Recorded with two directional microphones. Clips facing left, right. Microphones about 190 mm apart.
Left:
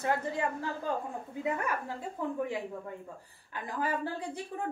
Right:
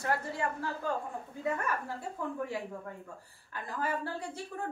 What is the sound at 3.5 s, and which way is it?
Speech, 15° left (ahead or behind).